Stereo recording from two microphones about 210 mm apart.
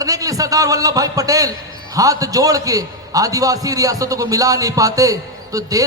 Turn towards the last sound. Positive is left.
turn(degrees=-15)  # may be behind; listen again after turning